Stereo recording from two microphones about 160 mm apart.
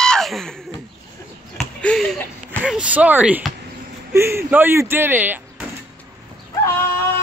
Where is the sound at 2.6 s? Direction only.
5° right (ahead or behind).